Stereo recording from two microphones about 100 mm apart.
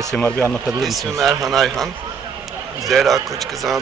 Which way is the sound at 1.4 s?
Centre (ahead or behind).